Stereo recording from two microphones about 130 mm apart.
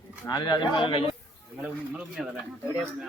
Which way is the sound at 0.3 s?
30° left (ahead or behind).